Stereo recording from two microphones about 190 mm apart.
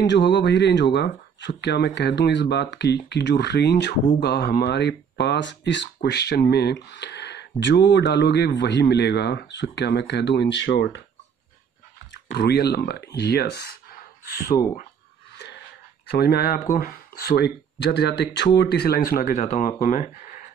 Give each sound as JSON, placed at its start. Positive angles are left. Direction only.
{"t": 0.0, "sound": "speech", "side_deg": 65}
{"t": 12.4, "sound": "speech", "side_deg": 60}
{"t": 15.3, "sound": "a sound", "side_deg": 65}
{"t": 16.1, "sound": "speech", "side_deg": 60}